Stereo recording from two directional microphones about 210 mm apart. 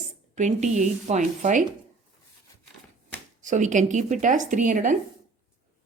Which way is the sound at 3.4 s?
35° right (ahead or behind).